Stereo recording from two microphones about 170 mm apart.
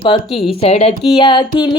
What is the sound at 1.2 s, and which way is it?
Music, 30° left (ahead or behind).